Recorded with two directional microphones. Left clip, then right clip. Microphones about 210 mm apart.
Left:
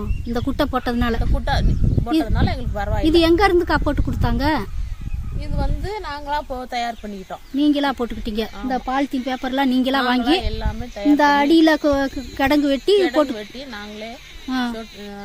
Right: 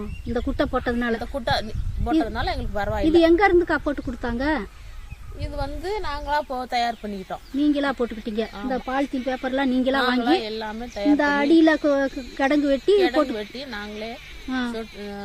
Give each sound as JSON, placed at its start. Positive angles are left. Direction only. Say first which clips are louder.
{"t": 0.3, "sound": "speech", "louder": "left 2 dB", "side_deg": 50}
{"t": 1.2, "sound": "speech", "louder": "even", "side_deg": -15}
{"t": 3.1, "sound": "speech", "louder": "left 2 dB", "side_deg": 50}
{"t": 5.5, "sound": "speech", "louder": "even", "side_deg": -15}
{"t": 7.6, "sound": "speech", "louder": "left 3 dB", "side_deg": 50}
{"t": 10.2, "sound": "speech", "louder": "left 2 dB", "side_deg": -15}
{"t": 11.2, "sound": "speech", "louder": "left 4 dB", "side_deg": 50}
{"t": 13.3, "sound": "speech", "louder": "even", "side_deg": -10}
{"t": 14.4, "sound": "speech", "louder": "left 4 dB", "side_deg": 50}